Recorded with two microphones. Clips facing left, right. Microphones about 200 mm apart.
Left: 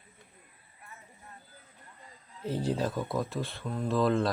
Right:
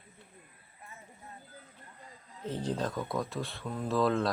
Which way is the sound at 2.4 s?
10° left (ahead or behind).